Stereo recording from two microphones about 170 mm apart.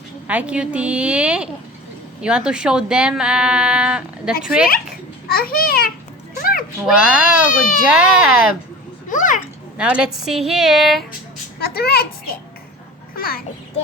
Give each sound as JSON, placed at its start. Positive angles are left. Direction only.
{"t": 0.3, "sound": "a woman's voice", "side_deg": -5}
{"t": 5.3, "sound": "a child's voice", "side_deg": 60}
{"t": 6.3, "sound": "a sound", "side_deg": 55}
{"t": 6.8, "sound": "a woman's voice", "side_deg": -5}
{"t": 9.0, "sound": "a child's voice", "side_deg": 50}
{"t": 9.7, "sound": "speech", "side_deg": -5}
{"t": 11.6, "sound": "a child's voice", "side_deg": 65}